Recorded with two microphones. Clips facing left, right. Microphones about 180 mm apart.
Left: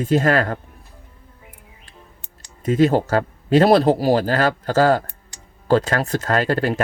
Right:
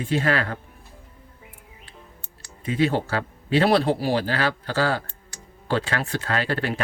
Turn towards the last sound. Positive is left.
turn(degrees=40)  # may be behind; listen again after turning